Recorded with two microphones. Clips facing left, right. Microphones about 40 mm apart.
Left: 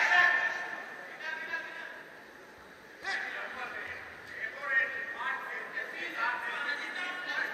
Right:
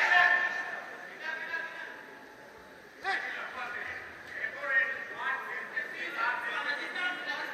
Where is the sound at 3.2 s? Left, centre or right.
Centre.